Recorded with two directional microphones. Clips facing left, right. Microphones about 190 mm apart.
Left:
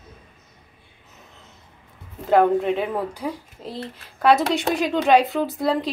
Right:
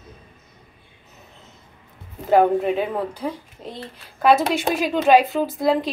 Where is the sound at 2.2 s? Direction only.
5° right (ahead or behind).